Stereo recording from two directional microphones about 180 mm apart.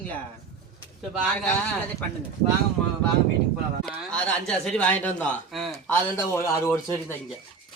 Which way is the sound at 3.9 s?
5° left (ahead or behind).